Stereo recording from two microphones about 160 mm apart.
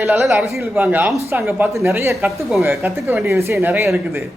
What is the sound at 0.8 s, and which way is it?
A man's voice, 10° right (ahead or behind).